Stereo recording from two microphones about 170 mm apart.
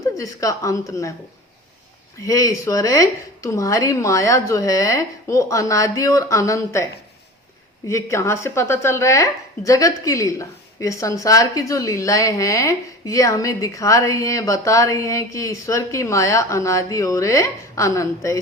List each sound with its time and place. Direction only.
0.0 s speech: 20° left (ahead or behind)
2.2 s speech: 20° left (ahead or behind)
7.9 s speech: 15° left (ahead or behind)